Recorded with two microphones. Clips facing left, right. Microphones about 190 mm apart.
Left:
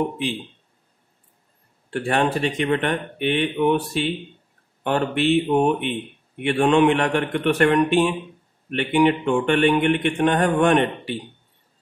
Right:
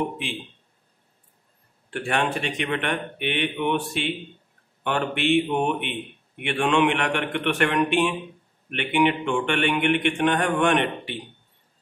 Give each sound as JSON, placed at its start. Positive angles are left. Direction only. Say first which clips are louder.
{"t": 1.9, "sound": "a man's voice", "louder": "left 4 dB", "side_deg": 35}